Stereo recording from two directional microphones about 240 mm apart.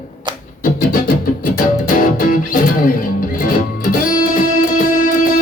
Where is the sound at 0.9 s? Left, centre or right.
Left.